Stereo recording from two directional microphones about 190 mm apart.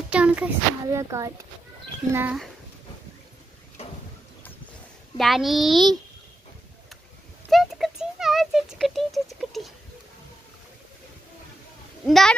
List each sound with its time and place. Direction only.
0.1 s a child's voice: 5° right (ahead or behind)
2.1 s a child's voice: 5° right (ahead or behind)
5.1 s a child's voice: centre (ahead or behind)
7.5 s a sound: centre (ahead or behind)
12.1 s a child's voice: centre (ahead or behind)